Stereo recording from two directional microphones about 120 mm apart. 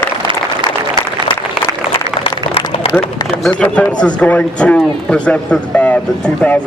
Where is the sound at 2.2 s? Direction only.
50° left (ahead or behind).